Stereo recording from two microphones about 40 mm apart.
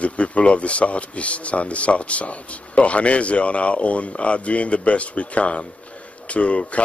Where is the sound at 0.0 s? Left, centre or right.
Left.